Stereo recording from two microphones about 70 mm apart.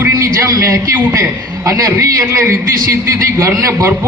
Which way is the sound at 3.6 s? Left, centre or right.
Right.